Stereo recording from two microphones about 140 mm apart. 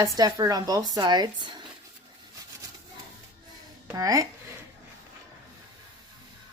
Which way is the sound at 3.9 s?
25° right (ahead or behind).